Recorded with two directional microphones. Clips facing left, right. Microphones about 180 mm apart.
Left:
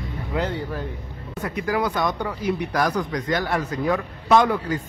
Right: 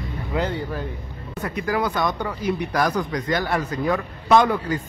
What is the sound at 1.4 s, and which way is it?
Speech, 15° left (ahead or behind).